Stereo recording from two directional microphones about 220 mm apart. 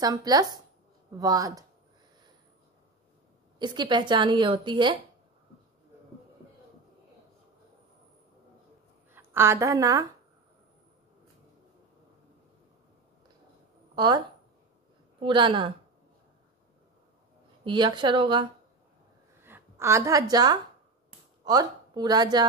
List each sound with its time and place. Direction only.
0.0 s speech: 15° right (ahead or behind)
3.5 s a woman's voice: 20° right (ahead or behind)
9.1 s a woman's voice: 10° right (ahead or behind)
13.9 s a woman's voice: 20° right (ahead or behind)
17.6 s a woman's voice: 20° right (ahead or behind)